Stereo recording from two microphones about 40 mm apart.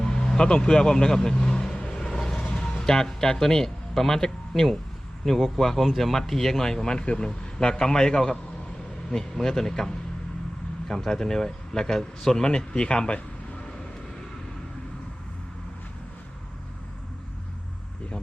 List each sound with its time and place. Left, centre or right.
0.0 s speech: centre
2.0 s a sound: centre
2.6 s a man's voice: centre; by 13.7 s left
13.7 s vehicle: centre